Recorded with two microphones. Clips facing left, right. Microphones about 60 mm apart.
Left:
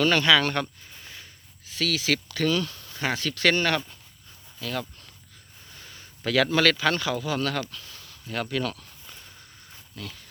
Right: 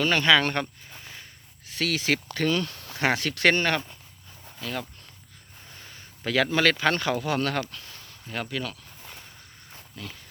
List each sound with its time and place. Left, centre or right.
0.0 s speech: right
1.8 s speech: right
2.0 s speech: right
2.7 s speech: right
8.4 s speech: centre
9.9 s speech: centre